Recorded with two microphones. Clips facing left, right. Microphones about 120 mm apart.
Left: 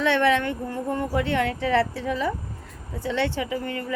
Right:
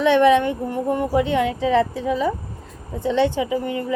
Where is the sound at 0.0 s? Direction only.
15° right (ahead or behind).